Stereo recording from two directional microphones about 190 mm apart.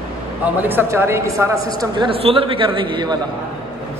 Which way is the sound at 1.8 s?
25° right (ahead or behind).